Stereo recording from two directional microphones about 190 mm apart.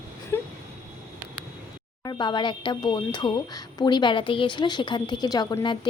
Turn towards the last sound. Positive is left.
turn(degrees=25)  # may be behind; listen again after turning